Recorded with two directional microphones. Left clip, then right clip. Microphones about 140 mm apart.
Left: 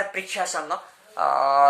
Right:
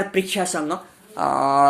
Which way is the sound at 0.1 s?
70° right (ahead or behind).